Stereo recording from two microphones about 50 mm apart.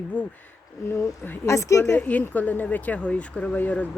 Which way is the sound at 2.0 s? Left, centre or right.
Left.